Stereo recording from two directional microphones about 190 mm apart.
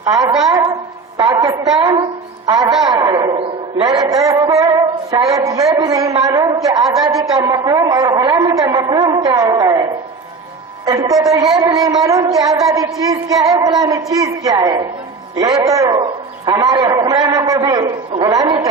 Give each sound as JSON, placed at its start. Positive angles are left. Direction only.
{"t": 0.0, "sound": "a woman's voice", "side_deg": -20}
{"t": 0.3, "sound": "a woman's voice", "side_deg": 0}
{"t": 1.1, "sound": "a woman's voice", "side_deg": -20}
{"t": 10.8, "sound": "a man's voice", "side_deg": -20}